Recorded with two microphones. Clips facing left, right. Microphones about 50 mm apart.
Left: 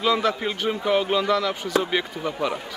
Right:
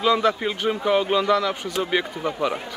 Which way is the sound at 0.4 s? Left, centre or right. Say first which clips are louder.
Right 2 dB; centre.